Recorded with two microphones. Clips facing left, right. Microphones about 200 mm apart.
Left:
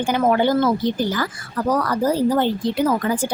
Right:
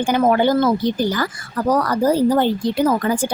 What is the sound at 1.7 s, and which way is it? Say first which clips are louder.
Speech: right 3 dB; 40° right (ahead or behind).